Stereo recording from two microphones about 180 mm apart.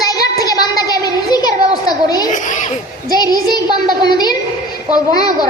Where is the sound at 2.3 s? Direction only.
45° left (ahead or behind).